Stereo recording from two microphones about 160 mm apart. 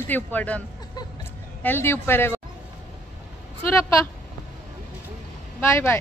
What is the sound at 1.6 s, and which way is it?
Speech, 15° left (ahead or behind).